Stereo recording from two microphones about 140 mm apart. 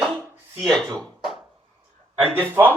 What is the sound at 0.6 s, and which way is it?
Speech, 5° left (ahead or behind).